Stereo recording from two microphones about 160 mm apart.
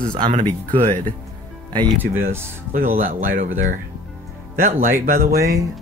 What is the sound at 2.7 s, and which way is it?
Speech, 60° right (ahead or behind).